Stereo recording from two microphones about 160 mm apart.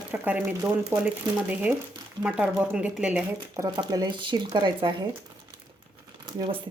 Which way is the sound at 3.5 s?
20° right (ahead or behind).